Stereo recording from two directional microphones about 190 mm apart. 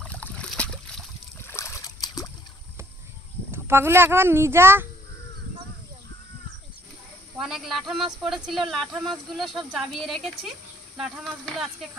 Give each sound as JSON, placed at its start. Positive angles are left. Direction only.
{"t": 0.0, "sound": "boat", "side_deg": 5}
{"t": 3.5, "sound": "a child's voice", "side_deg": -10}
{"t": 7.3, "sound": "speech", "side_deg": 0}